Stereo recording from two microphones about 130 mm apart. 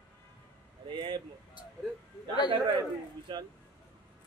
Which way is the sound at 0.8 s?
35° right (ahead or behind).